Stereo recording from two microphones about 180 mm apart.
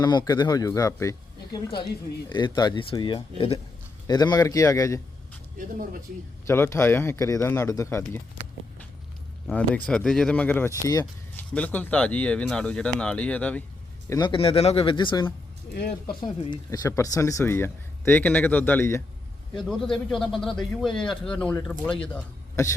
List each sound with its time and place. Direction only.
0.0 s speech: 25° left (ahead or behind)
5.5 s speech: 50° right (ahead or behind)
6.5 s speech: 15° left (ahead or behind)
9.5 s speech: 5° left (ahead or behind)
11.3 s speech: 10° left (ahead or behind)
14.1 s speech: 25° left (ahead or behind)
19.5 s speech: centre (ahead or behind)